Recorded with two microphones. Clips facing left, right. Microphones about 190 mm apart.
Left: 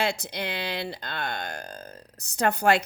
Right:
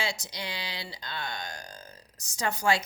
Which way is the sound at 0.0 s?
60° left (ahead or behind).